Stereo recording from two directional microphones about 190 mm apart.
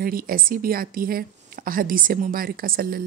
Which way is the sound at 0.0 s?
50° right (ahead or behind).